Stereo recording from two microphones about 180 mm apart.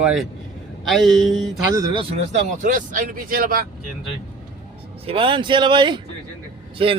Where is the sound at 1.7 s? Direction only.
20° right (ahead or behind).